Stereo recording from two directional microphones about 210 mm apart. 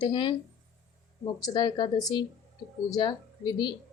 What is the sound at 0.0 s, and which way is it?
Speech, 20° left (ahead or behind).